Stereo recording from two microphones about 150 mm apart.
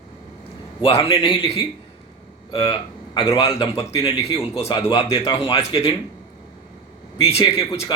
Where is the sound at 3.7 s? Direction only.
20° left (ahead or behind).